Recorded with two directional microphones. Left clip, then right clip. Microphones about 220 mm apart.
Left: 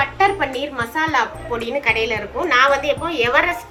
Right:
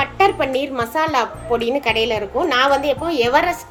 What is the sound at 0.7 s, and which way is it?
A woman's voice, 45° right (ahead or behind).